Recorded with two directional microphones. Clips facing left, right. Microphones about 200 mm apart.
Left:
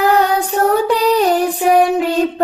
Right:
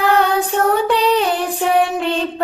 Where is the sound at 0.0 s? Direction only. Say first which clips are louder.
Left 2 dB; 40° left (ahead or behind).